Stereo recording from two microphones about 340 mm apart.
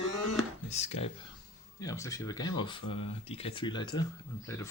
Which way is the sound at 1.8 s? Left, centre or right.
Centre.